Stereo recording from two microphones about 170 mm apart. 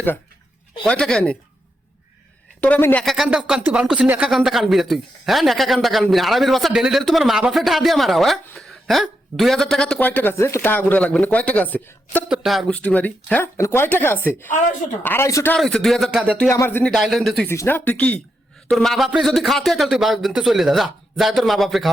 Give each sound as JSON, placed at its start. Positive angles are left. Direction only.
{"t": 0.9, "sound": "speech", "side_deg": 5}
{"t": 2.6, "sound": "speech", "side_deg": 10}
{"t": 12.3, "sound": "speech", "side_deg": 0}
{"t": 15.5, "sound": "speech", "side_deg": 0}
{"t": 16.4, "sound": "speech", "side_deg": 15}
{"t": 17.5, "sound": "speech", "side_deg": 15}